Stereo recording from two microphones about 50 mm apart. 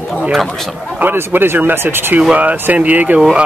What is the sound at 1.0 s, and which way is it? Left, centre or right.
Speech, right.